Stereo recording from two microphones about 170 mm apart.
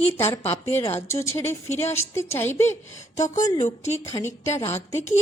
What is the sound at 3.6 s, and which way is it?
Speech, 40° left (ahead or behind).